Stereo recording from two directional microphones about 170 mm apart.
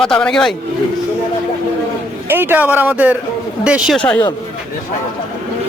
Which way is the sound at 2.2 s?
10° right (ahead or behind).